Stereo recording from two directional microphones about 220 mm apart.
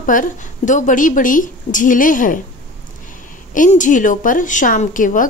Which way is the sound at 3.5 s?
35° left (ahead or behind).